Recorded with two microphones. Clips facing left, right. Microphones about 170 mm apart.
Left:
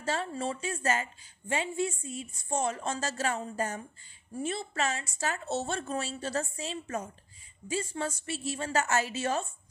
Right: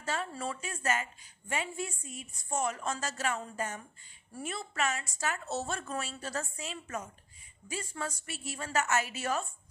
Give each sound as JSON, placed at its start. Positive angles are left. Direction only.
{"t": 0.0, "sound": "speech", "side_deg": 30}